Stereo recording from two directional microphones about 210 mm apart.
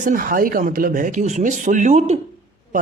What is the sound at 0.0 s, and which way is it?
Speech, 40° right (ahead or behind).